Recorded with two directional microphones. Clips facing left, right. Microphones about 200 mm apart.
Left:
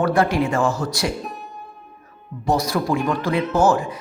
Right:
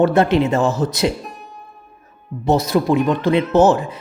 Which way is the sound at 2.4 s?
25° right (ahead or behind).